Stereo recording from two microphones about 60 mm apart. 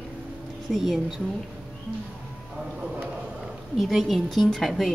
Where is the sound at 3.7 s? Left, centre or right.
Centre.